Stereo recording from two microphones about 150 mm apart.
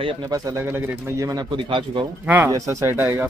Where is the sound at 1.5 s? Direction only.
30° right (ahead or behind).